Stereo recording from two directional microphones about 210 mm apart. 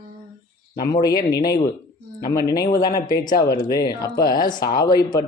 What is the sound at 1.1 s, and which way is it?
Speech, 15° left (ahead or behind).